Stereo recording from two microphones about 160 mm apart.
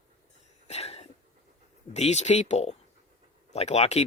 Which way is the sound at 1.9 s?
45° left (ahead or behind).